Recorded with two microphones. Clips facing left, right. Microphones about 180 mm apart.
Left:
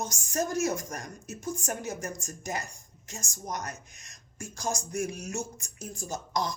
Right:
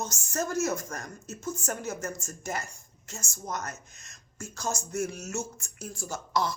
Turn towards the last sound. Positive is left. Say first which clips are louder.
# right 2 dB
turn(degrees=15)  # may be behind; listen again after turning